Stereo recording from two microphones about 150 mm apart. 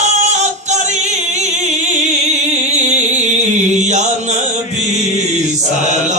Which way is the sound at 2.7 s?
50° right (ahead or behind).